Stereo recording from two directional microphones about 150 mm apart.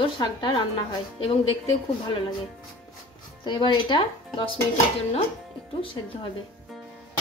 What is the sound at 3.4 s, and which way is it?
A woman's voice, 30° left (ahead or behind).